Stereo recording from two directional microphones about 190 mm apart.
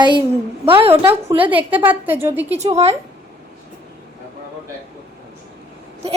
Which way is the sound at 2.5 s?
35° right (ahead or behind).